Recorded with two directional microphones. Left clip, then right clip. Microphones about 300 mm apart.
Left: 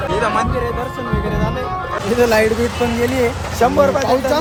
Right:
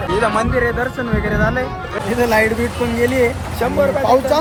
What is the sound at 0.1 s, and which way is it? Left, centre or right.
Speech, centre.